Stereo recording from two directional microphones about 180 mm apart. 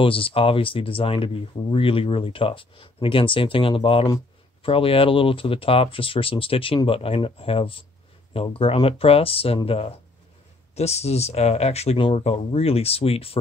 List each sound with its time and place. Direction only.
0.0 s speech: 30° left (ahead or behind)